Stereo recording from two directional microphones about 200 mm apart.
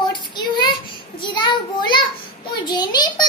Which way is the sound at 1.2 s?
25° left (ahead or behind).